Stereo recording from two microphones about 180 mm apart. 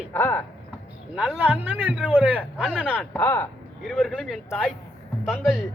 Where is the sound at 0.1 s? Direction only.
10° left (ahead or behind).